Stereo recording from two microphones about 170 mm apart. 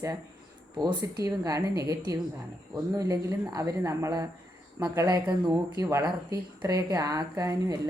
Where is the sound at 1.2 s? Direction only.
20° right (ahead or behind).